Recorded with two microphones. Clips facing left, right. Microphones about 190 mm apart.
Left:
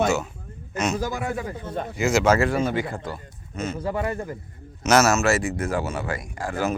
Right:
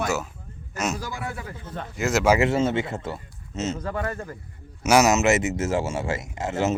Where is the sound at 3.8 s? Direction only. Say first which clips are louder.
Left 3 dB; 15° left (ahead or behind).